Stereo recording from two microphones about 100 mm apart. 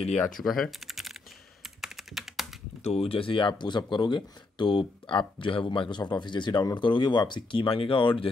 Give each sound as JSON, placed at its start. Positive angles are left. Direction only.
{"t": 0.4, "sound": "speech", "side_deg": 0}
{"t": 1.6, "sound": "computer keyboard", "side_deg": 0}
{"t": 2.8, "sound": "speech", "side_deg": 90}